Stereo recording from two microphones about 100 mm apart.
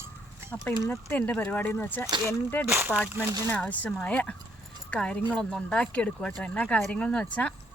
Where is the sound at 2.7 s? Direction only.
20° right (ahead or behind).